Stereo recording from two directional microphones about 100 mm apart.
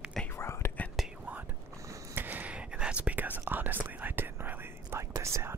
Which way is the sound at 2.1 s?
20° right (ahead or behind).